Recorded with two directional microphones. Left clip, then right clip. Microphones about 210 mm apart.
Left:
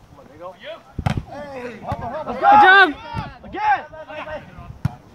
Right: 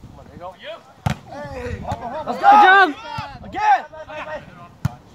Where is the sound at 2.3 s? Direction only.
50° right (ahead or behind).